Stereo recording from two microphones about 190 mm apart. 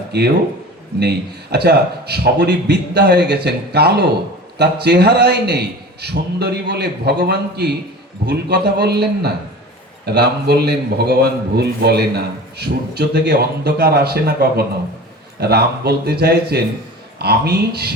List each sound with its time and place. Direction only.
0.1 s a man's voice: 60° right (ahead or behind)